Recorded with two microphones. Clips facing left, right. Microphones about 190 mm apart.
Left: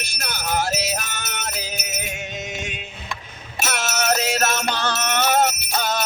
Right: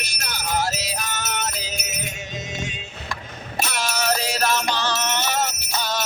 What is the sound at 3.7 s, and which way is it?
Music, 55° left (ahead or behind).